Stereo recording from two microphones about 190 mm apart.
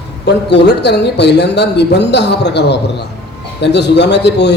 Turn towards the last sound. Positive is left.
turn(degrees=65)  # may be behind; listen again after turning